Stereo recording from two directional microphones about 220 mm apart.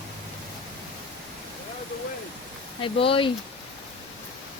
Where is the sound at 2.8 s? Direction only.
25° left (ahead or behind).